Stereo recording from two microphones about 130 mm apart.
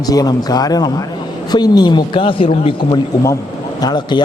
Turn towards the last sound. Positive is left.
turn(degrees=35)  # may be behind; listen again after turning